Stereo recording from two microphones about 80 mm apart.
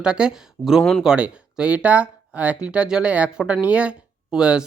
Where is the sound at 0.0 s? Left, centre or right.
Centre.